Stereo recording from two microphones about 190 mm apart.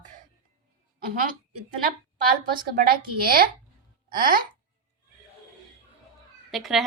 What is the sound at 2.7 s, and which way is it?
Speech, 50° right (ahead or behind).